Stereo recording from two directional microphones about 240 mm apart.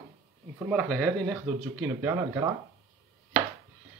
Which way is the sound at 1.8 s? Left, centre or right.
Centre.